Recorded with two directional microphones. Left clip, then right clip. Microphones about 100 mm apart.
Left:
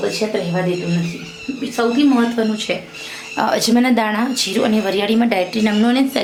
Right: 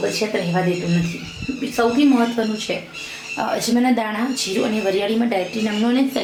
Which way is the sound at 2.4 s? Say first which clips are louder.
Left 3 dB; 55° left (ahead or behind).